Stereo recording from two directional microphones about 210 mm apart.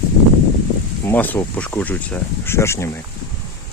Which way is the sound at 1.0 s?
10° left (ahead or behind).